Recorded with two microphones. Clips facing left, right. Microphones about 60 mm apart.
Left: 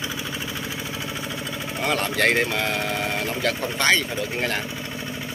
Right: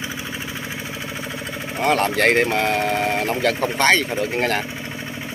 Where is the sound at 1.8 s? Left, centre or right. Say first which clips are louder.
Right 5 dB; right.